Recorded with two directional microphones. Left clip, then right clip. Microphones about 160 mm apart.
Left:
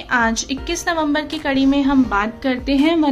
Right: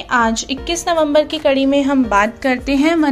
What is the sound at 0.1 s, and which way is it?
A woman's voice, 10° right (ahead or behind).